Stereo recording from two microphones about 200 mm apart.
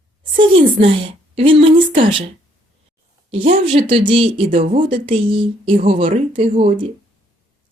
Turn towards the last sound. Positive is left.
turn(degrees=-30)  # may be behind; listen again after turning